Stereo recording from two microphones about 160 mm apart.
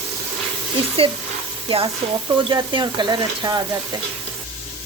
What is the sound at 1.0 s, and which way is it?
Speech, 35° right (ahead or behind).